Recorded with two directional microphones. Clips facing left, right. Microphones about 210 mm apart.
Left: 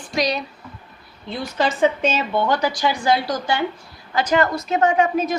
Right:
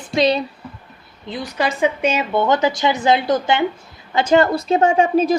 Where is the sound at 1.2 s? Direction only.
15° right (ahead or behind).